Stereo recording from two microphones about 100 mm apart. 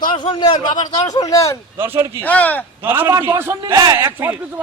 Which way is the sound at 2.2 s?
15° left (ahead or behind).